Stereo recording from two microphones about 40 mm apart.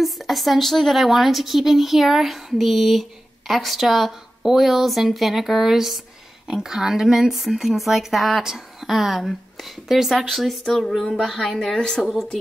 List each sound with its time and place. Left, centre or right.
0.0 s a woman's voice: centre